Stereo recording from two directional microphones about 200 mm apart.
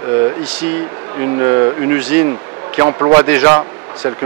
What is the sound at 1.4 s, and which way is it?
A man's voice, 20° right (ahead or behind).